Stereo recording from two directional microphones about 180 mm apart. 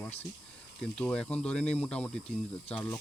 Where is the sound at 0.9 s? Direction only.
5° left (ahead or behind).